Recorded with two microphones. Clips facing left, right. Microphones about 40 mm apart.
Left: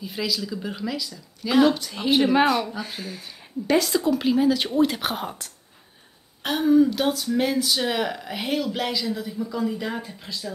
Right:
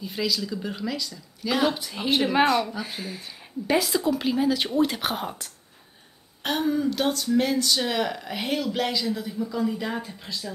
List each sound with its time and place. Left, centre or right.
0.0 s speech: centre